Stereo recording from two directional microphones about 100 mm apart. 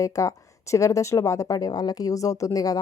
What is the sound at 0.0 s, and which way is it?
Speech, 35° left (ahead or behind).